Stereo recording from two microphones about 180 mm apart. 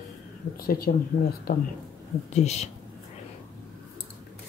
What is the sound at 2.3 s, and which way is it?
Speech, 40° left (ahead or behind).